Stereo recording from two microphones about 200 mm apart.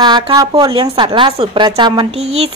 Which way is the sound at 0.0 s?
20° right (ahead or behind).